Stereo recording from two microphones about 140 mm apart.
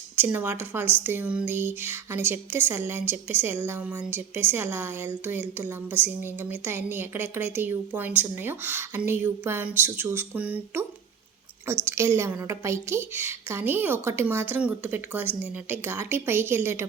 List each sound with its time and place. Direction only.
0.2 s speech: 15° right (ahead or behind)
11.9 s speech: 20° right (ahead or behind)